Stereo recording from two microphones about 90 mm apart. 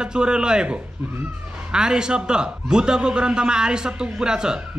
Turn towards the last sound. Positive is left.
turn(degrees=-10)  # may be behind; listen again after turning